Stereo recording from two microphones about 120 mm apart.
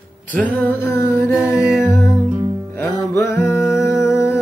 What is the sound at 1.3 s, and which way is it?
Music, 5° right (ahead or behind).